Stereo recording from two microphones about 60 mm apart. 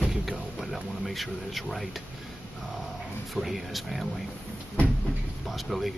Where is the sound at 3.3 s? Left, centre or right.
Centre.